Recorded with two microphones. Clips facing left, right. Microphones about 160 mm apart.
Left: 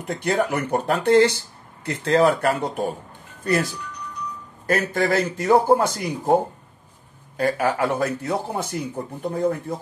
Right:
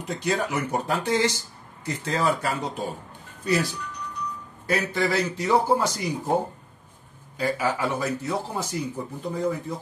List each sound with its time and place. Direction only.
0.0 s a man's voice: 55° left (ahead or behind)
7.3 s speech: 55° left (ahead or behind)